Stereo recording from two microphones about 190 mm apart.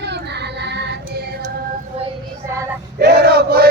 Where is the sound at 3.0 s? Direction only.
60° right (ahead or behind).